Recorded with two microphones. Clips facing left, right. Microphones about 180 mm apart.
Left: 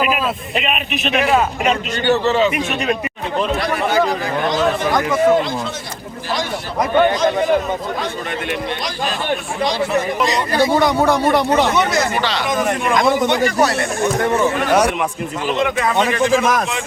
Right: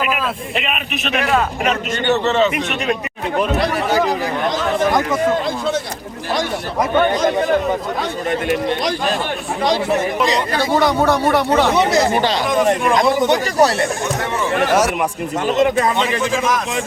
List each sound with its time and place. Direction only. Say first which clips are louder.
1.1 s a man's voice: left 2 dB; 5° left (ahead or behind)
10.8 s speech: even; 10° left (ahead or behind)
11.7 s speech: right 2 dB; 35° right (ahead or behind)
12.1 s speech: right 3 dB; 45° right (ahead or behind)
12.5 s speech: right 3 dB; 35° right (ahead or behind)